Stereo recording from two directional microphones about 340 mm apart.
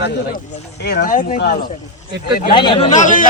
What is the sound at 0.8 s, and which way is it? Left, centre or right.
Speech, left.